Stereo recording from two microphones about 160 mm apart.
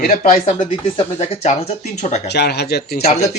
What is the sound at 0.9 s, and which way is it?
Speech, 40° left (ahead or behind).